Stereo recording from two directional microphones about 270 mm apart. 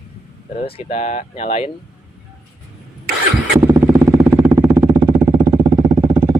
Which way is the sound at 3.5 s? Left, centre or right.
Centre.